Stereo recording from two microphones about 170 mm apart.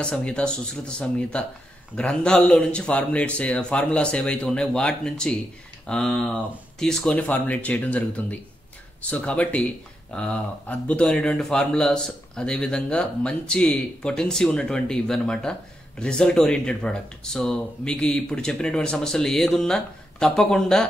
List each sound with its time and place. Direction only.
0.0 s speech: 5° left (ahead or behind)